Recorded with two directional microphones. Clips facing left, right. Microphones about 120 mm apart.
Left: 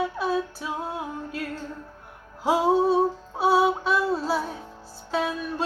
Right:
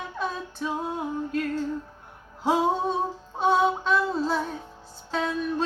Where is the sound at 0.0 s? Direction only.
5° left (ahead or behind).